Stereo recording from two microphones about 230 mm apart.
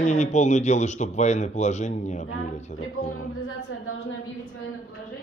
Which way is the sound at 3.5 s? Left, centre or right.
Left.